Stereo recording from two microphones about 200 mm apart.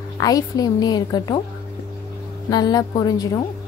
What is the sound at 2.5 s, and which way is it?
Speech, 20° left (ahead or behind).